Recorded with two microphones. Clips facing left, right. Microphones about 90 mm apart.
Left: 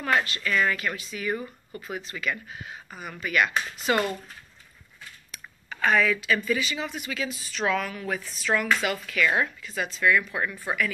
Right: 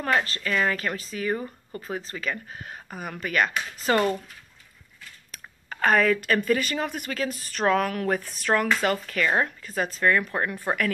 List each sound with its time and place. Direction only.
0.0 s speech: 35° right (ahead or behind)
5.3 s speech: 45° right (ahead or behind)